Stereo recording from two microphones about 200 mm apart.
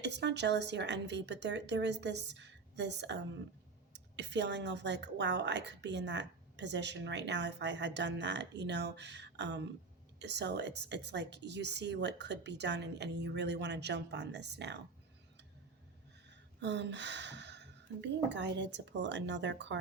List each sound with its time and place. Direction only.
0.0 s a woman's voice: 60° right (ahead or behind)
16.3 s speech: 60° right (ahead or behind)